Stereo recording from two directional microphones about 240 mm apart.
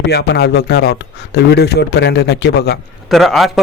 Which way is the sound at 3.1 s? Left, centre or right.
Centre.